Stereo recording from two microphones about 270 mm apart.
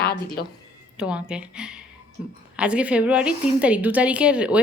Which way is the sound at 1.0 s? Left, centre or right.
Centre.